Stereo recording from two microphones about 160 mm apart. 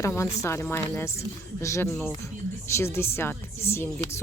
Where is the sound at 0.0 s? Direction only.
15° left (ahead or behind).